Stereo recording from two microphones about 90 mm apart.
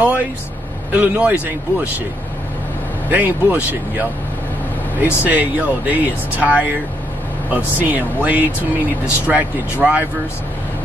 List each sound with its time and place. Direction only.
0.0 s vehicle: 15° right (ahead or behind)
0.9 s speech: 20° right (ahead or behind)
3.1 s speech: 15° right (ahead or behind)
5.2 s speech: 15° right (ahead or behind)